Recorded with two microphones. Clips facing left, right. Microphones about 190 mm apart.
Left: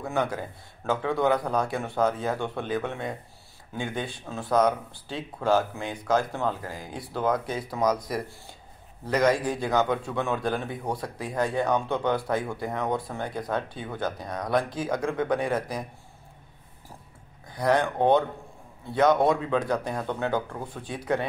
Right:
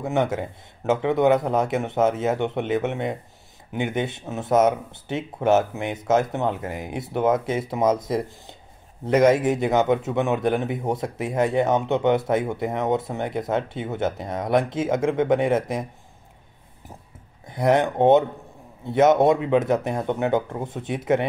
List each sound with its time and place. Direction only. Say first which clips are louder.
0.0 s a man's voice: right 5 dB; 20° right (ahead or behind)
17.5 s a man's voice: right 4 dB; 20° right (ahead or behind)